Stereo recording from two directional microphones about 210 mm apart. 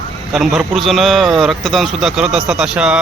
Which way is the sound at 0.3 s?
Centre (ahead or behind).